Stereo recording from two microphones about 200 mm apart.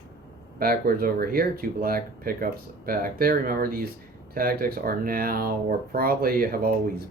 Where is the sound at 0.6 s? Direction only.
50° right (ahead or behind).